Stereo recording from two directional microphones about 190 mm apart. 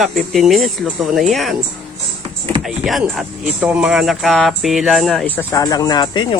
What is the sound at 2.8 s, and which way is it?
Speech, centre (ahead or behind).